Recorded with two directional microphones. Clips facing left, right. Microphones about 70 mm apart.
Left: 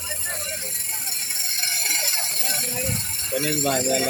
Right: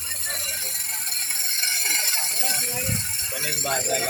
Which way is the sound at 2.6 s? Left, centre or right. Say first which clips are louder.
Left 1 dB; right.